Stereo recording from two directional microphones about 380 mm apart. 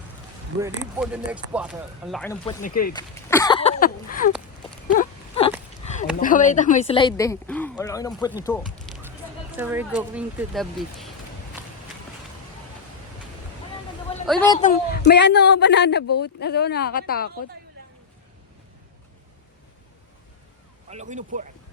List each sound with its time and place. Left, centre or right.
0.6 s speech: centre
2.6 s speech: left
2.9 s speech: centre
4.9 s a sound: centre
8.5 s speech: centre
8.9 s a sound: centre
9.6 s speech: centre
11.6 s run: centre
14.3 s speech: centre
14.6 s speech: left
20.9 s speech: centre